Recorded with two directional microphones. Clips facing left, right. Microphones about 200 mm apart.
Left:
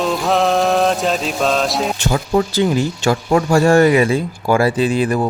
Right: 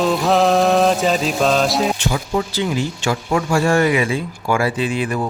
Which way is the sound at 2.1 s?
45° left (ahead or behind).